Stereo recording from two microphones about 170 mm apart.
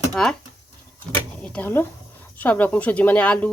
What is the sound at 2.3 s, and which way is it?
Speech, 10° left (ahead or behind).